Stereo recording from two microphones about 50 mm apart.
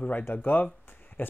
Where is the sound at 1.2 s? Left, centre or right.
Left.